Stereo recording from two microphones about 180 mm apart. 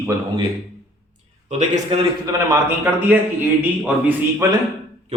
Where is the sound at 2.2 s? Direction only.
15° right (ahead or behind).